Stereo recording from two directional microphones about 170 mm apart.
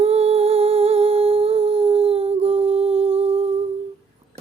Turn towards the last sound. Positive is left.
turn(degrees=-35)  # may be behind; listen again after turning